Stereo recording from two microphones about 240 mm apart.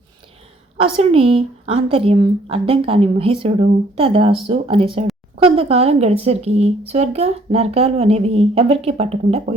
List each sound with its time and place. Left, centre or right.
0.8 s speech: right